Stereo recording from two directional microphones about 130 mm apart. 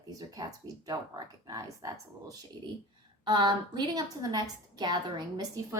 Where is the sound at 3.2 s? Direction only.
35° right (ahead or behind).